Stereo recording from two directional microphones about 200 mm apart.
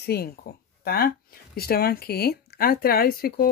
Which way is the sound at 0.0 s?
50° left (ahead or behind).